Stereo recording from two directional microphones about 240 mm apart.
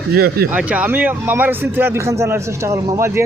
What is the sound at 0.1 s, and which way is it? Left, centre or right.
Speech, right.